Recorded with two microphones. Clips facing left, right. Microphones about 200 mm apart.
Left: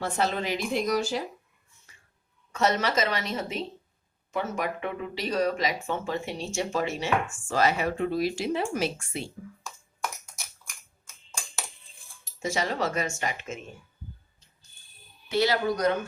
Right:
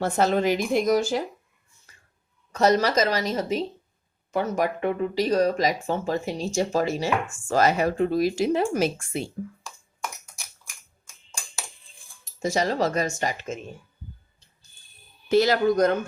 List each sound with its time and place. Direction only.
0.0 s speech: 45° right (ahead or behind)
2.5 s speech: 35° right (ahead or behind)
12.4 s speech: 35° right (ahead or behind)
15.3 s speech: 45° right (ahead or behind)